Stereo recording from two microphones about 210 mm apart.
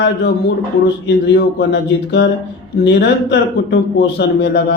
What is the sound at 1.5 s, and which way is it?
A man's voice, 50° left (ahead or behind).